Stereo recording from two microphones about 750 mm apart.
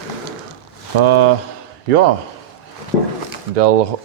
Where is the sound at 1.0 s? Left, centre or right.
Right.